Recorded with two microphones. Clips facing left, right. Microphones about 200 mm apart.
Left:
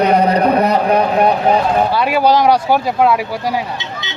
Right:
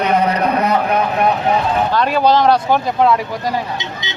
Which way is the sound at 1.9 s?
10° left (ahead or behind).